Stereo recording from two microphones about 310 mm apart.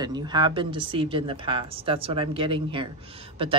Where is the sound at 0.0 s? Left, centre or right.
Centre.